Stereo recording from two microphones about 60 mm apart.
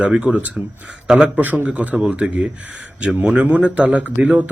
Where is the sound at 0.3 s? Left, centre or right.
Centre.